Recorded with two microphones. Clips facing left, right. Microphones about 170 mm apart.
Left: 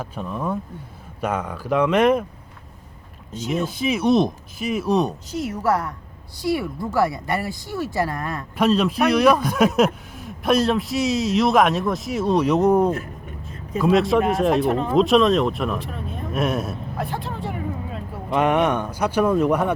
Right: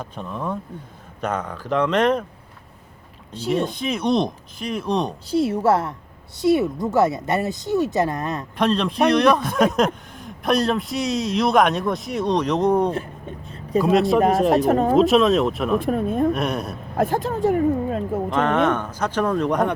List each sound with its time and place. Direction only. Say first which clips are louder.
0.0 s speech: left 2 dB; 5° left (ahead or behind)
3.5 s a man's voice: even; 5° left (ahead or behind)
5.3 s speech: right 8 dB; 30° right (ahead or behind)
8.5 s a man's voice: left 2 dB; 5° left (ahead or behind)
14.5 s speech: right 3 dB; 40° right (ahead or behind)
14.9 s a man's voice: left 2 dB; centre (ahead or behind)
15.8 s speech: right 11 dB; 50° right (ahead or behind)
16.3 s a man's voice: left 1 dB; centre (ahead or behind)
17.0 s speech: right 10 dB; 45° right (ahead or behind)
18.3 s speech: left 2 dB; 10° left (ahead or behind)